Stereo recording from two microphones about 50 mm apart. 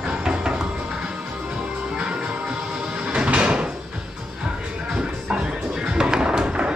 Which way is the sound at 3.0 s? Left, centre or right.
Right.